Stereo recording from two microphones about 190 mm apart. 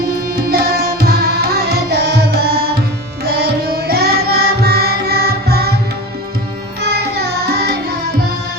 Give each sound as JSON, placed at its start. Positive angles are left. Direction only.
{"t": 0.3, "sound": "music", "side_deg": -55}
{"t": 3.2, "sound": "carnatic music", "side_deg": -55}
{"t": 6.8, "sound": "music", "side_deg": -60}